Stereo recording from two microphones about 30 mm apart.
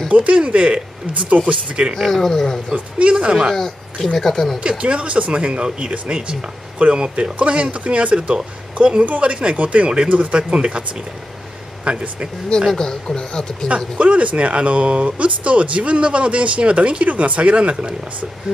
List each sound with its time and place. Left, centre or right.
0.1 s speech: right
2.0 s speech: centre
3.0 s speech: right
3.5 s speech: centre
4.6 s speech: right
10.3 s speech: right
11.9 s speech: right
12.7 s speech: left
13.9 s speech: right